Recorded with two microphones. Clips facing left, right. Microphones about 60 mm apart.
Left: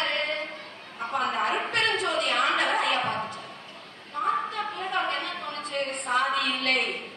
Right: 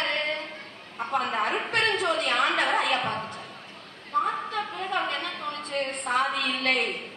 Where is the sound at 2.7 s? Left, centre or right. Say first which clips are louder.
Even; left.